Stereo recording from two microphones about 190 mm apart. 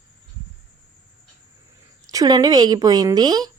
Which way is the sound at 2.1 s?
20° right (ahead or behind).